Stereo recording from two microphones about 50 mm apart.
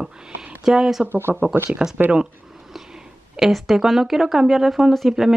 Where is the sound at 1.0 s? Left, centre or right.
Right.